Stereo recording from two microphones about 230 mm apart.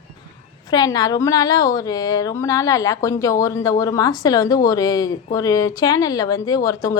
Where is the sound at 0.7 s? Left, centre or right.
Centre.